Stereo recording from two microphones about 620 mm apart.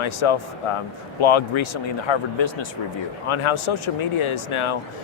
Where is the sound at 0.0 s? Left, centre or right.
Left.